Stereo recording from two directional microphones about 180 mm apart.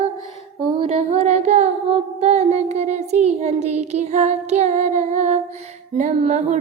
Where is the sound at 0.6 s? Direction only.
30° right (ahead or behind).